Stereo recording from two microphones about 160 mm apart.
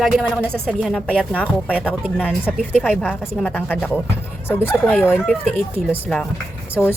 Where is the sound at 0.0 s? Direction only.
5° left (ahead or behind).